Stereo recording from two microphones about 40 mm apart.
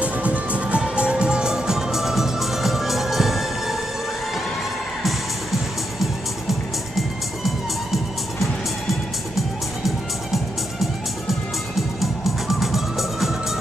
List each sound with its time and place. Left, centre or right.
0.0 s music: right
0.8 s music: right; by 3.7 s centre
5.0 s music: centre
9.8 s music: centre